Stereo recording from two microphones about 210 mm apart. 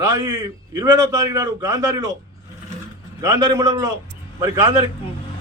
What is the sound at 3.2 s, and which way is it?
Speech, 15° right (ahead or behind).